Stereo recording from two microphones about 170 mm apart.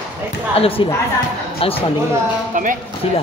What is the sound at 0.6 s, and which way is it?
Speech, 35° left (ahead or behind).